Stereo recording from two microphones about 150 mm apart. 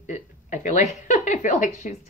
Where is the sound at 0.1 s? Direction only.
55° left (ahead or behind).